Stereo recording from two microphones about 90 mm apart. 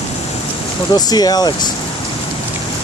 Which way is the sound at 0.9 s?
45° left (ahead or behind).